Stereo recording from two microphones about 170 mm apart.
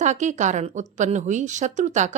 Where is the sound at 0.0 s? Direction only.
45° right (ahead or behind).